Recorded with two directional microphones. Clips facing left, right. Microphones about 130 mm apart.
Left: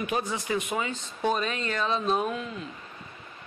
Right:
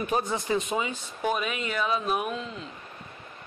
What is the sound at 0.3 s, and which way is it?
Speech, 25° right (ahead or behind).